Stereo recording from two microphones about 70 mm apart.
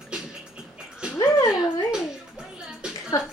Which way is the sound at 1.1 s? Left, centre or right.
Left.